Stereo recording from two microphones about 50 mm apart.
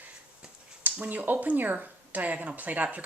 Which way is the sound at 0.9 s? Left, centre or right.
Right.